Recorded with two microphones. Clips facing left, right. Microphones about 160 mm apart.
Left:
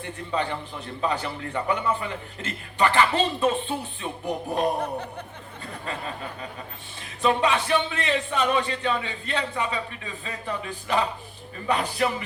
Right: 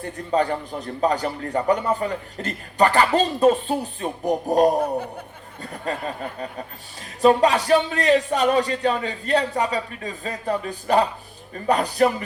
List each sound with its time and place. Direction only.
0.0 s a man's voice: 40° right (ahead or behind)
4.8 s speech: 10° right (ahead or behind)
7.2 s a man's voice: 40° right (ahead or behind)